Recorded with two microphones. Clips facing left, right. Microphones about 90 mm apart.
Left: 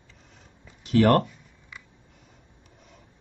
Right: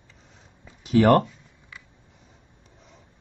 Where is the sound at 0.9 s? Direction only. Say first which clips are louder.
Right 2 dB; 10° right (ahead or behind).